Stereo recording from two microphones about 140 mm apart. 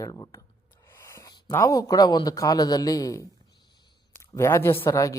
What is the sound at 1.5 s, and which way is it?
Speech, 20° left (ahead or behind).